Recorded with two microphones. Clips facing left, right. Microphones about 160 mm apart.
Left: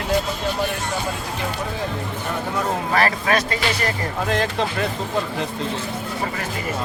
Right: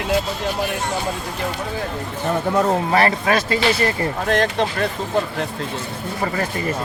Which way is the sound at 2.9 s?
30° right (ahead or behind).